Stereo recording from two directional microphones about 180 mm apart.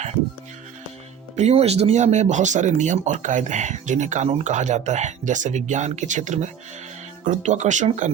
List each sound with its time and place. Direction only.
1.4 s speech: 35° right (ahead or behind)